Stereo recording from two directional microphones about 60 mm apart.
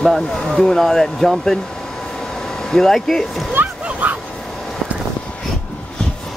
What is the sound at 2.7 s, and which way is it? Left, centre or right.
Speech, centre.